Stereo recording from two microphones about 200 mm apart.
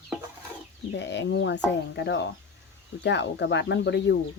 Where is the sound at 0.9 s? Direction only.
60° left (ahead or behind).